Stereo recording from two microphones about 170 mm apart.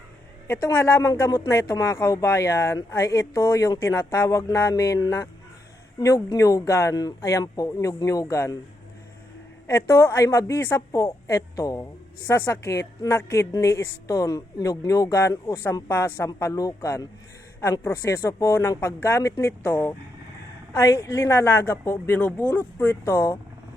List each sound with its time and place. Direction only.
0.4 s a woman's voice: 15° left (ahead or behind)
9.6 s a woman's voice: 15° left (ahead or behind)